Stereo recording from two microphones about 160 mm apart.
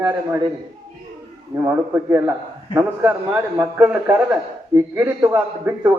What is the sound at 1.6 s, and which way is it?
A man's voice, 15° right (ahead or behind).